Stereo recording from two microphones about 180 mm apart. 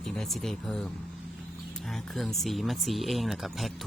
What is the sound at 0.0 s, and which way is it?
Speech, centre (ahead or behind).